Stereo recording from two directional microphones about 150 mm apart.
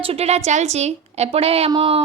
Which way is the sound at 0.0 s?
40° right (ahead or behind).